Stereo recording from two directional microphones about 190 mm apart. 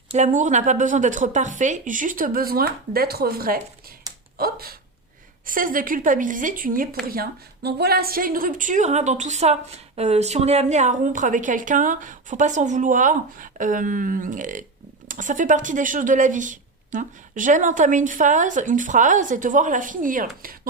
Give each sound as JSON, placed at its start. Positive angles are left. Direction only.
{"t": 0.1, "sound": "a woman's voice", "side_deg": -40}